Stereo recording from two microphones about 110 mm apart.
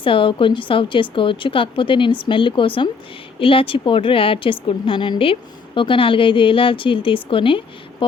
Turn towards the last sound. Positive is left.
turn(degrees=50)  # may be behind; listen again after turning